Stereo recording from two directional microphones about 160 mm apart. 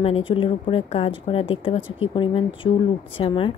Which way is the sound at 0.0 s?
35° left (ahead or behind).